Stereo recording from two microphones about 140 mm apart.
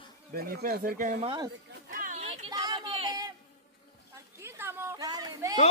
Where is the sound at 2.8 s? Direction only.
40° right (ahead or behind).